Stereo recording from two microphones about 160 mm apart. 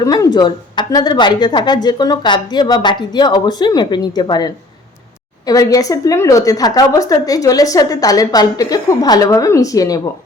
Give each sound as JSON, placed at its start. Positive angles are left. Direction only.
{"t": 0.0, "sound": "a woman's voice", "side_deg": 25}